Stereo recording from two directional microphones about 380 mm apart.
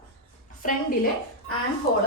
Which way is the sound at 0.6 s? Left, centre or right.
Left.